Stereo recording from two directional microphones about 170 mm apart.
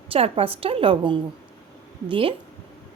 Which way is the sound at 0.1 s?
35° right (ahead or behind).